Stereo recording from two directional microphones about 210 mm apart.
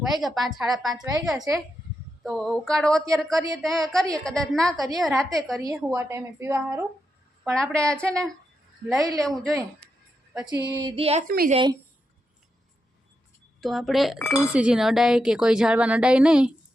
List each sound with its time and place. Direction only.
0.0 s a woman's voice: centre (ahead or behind)
0.9 s speech: 20° right (ahead or behind)
1.2 s a woman's voice: centre (ahead or behind)
5.5 s speech: 15° right (ahead or behind)
7.4 s a woman's voice: 5° left (ahead or behind)
9.0 s speech: 15° right (ahead or behind)
9.2 s a woman's voice: centre (ahead or behind)
10.3 s a sound: 20° right (ahead or behind)
10.8 s speech: 25° right (ahead or behind)
11.3 s a woman's voice: 40° right (ahead or behind)
11.5 s speech: 20° right (ahead or behind)
13.6 s a woman's voice: centre (ahead or behind)